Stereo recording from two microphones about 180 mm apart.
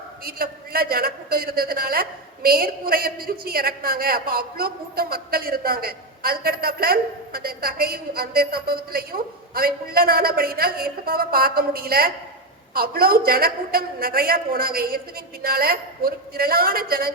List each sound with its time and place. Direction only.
0.3 s a woman's voice: 55° right (ahead or behind)